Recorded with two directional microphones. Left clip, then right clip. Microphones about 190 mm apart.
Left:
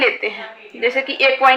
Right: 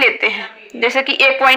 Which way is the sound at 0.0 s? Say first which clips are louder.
Right 4 dB; 60° right (ahead or behind).